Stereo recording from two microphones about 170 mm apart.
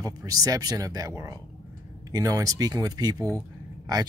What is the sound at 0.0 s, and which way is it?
Speech, 20° right (ahead or behind).